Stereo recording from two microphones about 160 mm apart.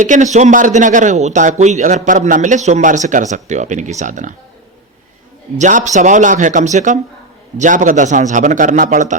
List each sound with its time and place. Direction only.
0.0 s a man's voice: 50° right (ahead or behind)
5.5 s a man's voice: 50° right (ahead or behind)